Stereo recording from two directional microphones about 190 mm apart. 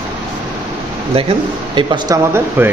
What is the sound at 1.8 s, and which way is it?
Speech, 25° right (ahead or behind).